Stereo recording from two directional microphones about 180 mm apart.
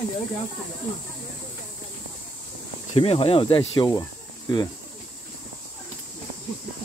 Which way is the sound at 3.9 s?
20° left (ahead or behind).